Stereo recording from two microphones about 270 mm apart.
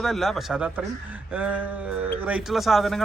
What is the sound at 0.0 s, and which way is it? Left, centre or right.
A man's voice, centre.